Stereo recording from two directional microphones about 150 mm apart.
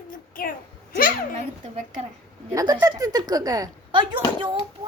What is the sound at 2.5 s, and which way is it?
A woman's voice, 25° right (ahead or behind).